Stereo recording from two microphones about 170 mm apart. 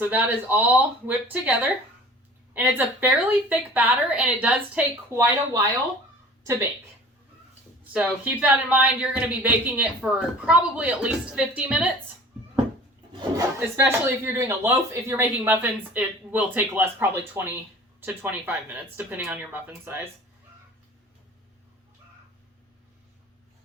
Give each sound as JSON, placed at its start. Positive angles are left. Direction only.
{"t": 0.0, "sound": "a woman's voice", "side_deg": -10}
{"t": 7.9, "sound": "speech", "side_deg": -10}
{"t": 13.1, "sound": "speech", "side_deg": -20}